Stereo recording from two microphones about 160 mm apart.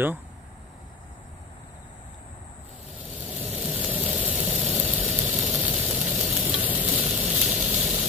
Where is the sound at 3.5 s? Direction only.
10° right (ahead or behind).